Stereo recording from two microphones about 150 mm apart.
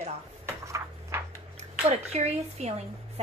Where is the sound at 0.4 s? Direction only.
15° right (ahead or behind).